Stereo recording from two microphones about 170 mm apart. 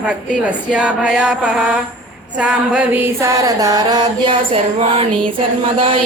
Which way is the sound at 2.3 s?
5° right (ahead or behind).